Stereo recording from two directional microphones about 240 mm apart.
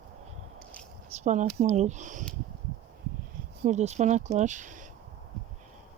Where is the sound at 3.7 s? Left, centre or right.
Right.